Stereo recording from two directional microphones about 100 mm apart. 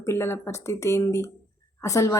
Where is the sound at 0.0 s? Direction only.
25° left (ahead or behind).